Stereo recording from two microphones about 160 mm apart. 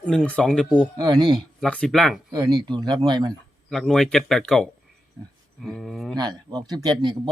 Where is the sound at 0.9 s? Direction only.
25° right (ahead or behind).